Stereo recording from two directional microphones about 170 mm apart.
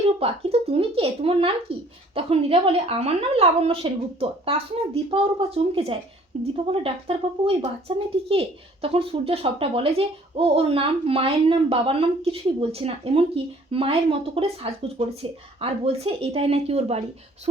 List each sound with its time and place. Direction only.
0.2 s speech: 35° right (ahead or behind)